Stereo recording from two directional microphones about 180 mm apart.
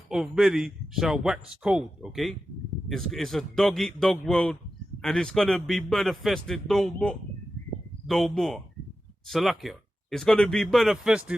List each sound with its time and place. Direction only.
0.1 s speech: centre (ahead or behind)